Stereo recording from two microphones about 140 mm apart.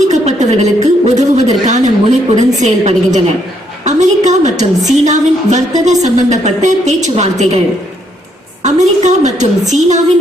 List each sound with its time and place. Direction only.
0.0 s a woman's voice: 55° right (ahead or behind)
3.8 s a sound: 55° right (ahead or behind)
4.9 s speech: 55° right (ahead or behind)
8.6 s speech: 55° right (ahead or behind)